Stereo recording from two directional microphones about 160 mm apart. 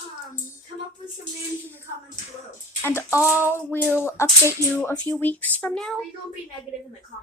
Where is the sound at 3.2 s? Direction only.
10° right (ahead or behind).